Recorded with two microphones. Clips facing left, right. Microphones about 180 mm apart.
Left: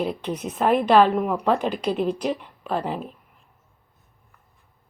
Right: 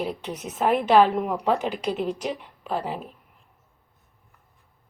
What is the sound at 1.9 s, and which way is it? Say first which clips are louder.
Speech: left 4 dB; 55° left (ahead or behind).